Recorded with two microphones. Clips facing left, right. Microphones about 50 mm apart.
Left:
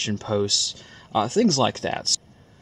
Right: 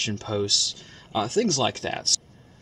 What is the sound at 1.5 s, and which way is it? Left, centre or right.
Speech, centre.